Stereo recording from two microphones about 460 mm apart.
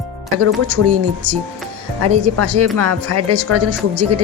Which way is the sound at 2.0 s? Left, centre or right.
Right.